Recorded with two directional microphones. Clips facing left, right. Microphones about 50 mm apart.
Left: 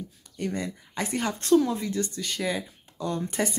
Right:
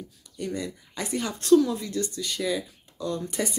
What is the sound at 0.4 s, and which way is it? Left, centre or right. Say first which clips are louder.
Speech: left 1 dB; left.